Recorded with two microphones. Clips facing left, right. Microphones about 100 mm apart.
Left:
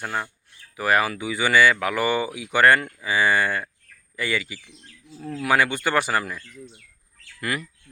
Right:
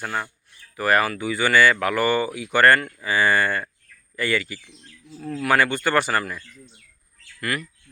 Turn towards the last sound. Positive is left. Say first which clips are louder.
# right 1 dB
turn(degrees=20)  # may be behind; listen again after turning